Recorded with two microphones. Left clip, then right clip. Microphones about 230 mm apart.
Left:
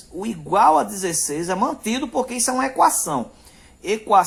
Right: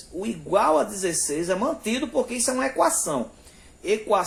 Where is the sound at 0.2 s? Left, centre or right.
Left.